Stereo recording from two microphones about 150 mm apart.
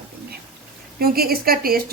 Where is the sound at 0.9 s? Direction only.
90° right.